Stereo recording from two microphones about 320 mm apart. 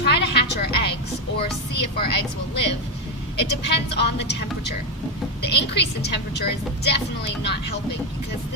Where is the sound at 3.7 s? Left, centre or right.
Left.